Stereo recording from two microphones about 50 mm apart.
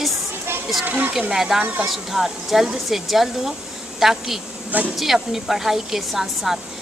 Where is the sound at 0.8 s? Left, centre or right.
Right.